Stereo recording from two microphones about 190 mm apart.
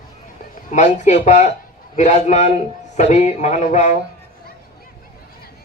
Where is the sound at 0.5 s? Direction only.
40° left (ahead or behind).